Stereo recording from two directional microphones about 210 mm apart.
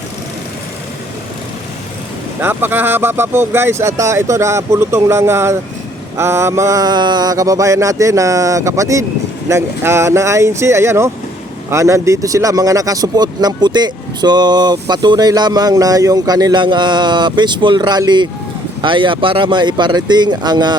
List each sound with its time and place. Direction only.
2.4 s speech: 10° right (ahead or behind)